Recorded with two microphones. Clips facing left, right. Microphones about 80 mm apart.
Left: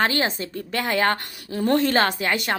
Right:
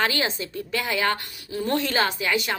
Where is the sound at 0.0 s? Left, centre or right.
Left.